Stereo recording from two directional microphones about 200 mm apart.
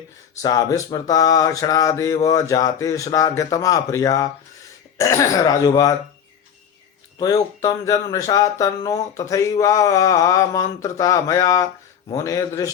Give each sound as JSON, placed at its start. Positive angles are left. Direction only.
{"t": 0.4, "sound": "speech", "side_deg": 20}
{"t": 7.2, "sound": "speech", "side_deg": 20}